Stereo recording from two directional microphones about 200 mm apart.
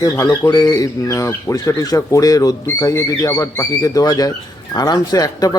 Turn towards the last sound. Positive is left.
turn(degrees=20)  # may be behind; listen again after turning